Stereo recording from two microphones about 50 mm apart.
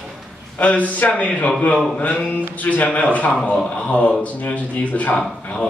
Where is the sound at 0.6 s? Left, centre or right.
Left.